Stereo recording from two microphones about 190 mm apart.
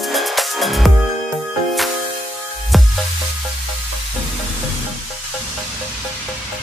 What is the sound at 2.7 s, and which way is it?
Music, centre (ahead or behind).